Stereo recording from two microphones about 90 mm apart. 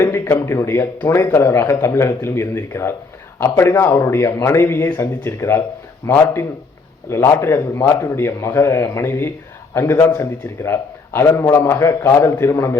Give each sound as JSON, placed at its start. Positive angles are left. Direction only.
{"t": 0.0, "sound": "a man's voice", "side_deg": 30}